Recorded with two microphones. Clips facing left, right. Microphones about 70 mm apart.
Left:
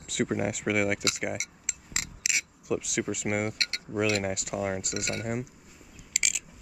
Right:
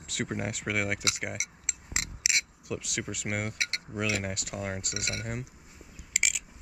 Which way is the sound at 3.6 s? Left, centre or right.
Centre.